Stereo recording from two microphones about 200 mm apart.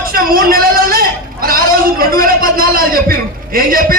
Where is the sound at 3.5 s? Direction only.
45° right (ahead or behind).